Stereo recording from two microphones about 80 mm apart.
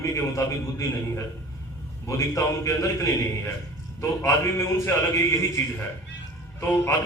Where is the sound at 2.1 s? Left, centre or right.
Left.